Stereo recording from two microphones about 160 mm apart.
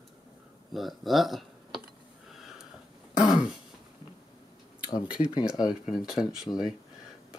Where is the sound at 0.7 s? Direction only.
Centre (ahead or behind).